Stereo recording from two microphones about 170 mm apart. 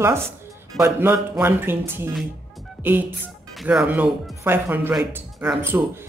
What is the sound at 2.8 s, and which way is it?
Music, 10° right (ahead or behind).